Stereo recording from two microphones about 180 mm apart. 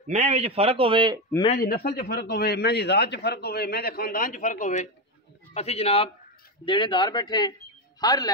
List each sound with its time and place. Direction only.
0.0 s a man's voice: 35° right (ahead or behind)
1.6 s a man's voice: 60° left (ahead or behind); by 8.3 s 20° left (ahead or behind)